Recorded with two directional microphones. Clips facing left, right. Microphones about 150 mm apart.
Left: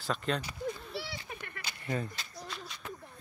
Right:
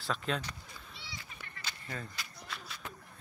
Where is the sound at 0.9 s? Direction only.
70° left (ahead or behind).